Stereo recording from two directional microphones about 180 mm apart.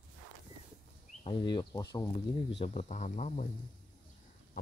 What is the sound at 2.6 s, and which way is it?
Speech, 40° left (ahead or behind).